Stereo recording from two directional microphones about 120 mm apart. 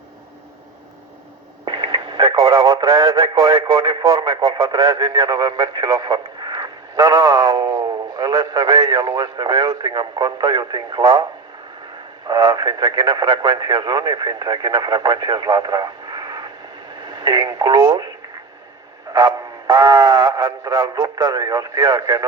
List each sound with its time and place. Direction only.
1.6 s speech: 40° right (ahead or behind)
12.3 s speech: 35° right (ahead or behind)
19.1 s speech: 30° right (ahead or behind)